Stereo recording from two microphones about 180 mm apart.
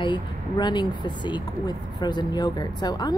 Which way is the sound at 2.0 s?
25° left (ahead or behind).